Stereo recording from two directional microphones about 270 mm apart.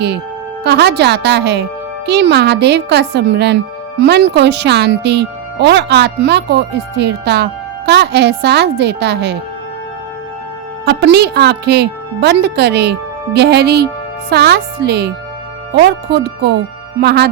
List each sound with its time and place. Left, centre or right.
0.6 s speech: right
10.8 s speech: right